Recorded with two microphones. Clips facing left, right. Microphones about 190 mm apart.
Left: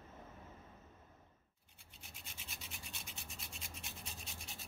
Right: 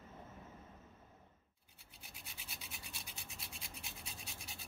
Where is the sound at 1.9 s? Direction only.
Centre (ahead or behind).